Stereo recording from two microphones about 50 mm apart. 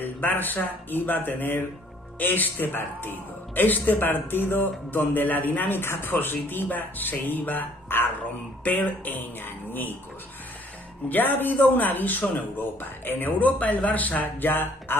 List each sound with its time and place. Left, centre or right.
0.0 s a man's voice: left
11.1 s a man's voice: left